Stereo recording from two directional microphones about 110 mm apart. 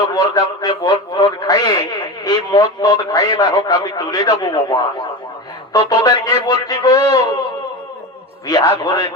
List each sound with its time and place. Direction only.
0.0 s a man's voice: 35° left (ahead or behind)
5.9 s a man's voice: 35° left (ahead or behind)
8.4 s a man's voice: 35° left (ahead or behind)